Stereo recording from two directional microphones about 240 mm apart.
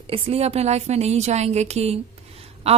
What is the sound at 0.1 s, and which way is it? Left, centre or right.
A woman's voice, right.